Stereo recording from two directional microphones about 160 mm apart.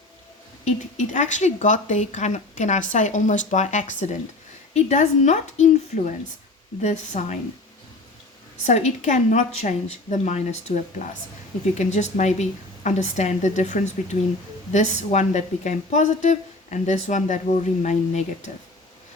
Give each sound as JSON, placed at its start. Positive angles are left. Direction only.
{"t": 0.6, "sound": "a woman's voice", "side_deg": 50}
{"t": 8.6, "sound": "a woman's voice", "side_deg": 45}
{"t": 11.7, "sound": "a woman's voice", "side_deg": 45}